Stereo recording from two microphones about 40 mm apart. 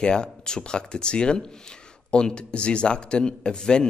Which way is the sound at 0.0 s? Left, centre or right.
Centre.